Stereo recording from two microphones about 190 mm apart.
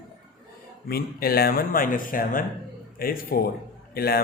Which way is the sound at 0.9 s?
55° left (ahead or behind).